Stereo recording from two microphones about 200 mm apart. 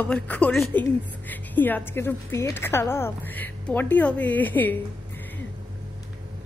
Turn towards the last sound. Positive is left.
turn(degrees=10)  # may be behind; listen again after turning